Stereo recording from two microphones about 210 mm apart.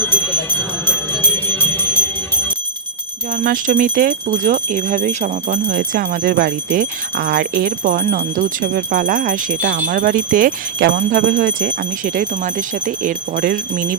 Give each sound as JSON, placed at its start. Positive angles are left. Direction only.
{"t": 0.0, "sound": "a sound", "side_deg": 10}
{"t": 0.9, "sound": "jingle bell", "side_deg": 10}
{"t": 3.3, "sound": "speech", "side_deg": -40}